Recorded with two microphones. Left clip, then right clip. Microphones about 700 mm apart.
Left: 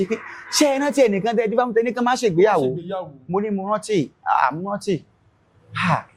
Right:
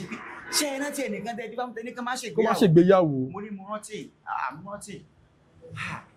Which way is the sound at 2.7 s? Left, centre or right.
Right.